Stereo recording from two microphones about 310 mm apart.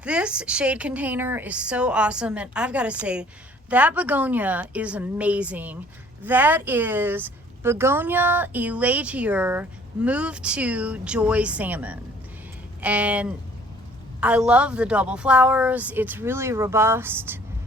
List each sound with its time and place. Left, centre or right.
0.0 s speech: centre